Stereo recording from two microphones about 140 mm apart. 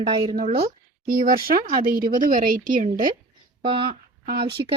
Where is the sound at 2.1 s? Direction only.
75° right (ahead or behind).